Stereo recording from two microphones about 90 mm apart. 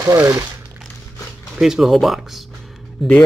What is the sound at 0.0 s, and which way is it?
Speech, 40° right (ahead or behind).